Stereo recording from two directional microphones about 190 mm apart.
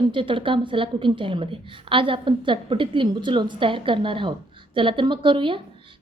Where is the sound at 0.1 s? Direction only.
25° right (ahead or behind).